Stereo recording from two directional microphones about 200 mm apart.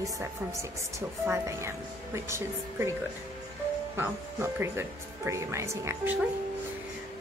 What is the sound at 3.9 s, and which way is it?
Speech, 10° right (ahead or behind).